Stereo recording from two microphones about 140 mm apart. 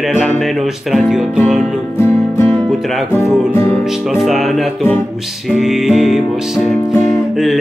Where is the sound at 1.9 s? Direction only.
15° left (ahead or behind).